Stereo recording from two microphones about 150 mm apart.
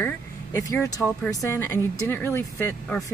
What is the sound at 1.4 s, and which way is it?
Speech, 15° left (ahead or behind).